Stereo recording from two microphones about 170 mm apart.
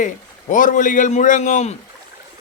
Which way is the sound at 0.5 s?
50° left (ahead or behind).